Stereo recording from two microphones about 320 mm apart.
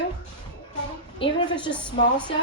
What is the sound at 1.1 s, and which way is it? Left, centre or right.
Speech, centre.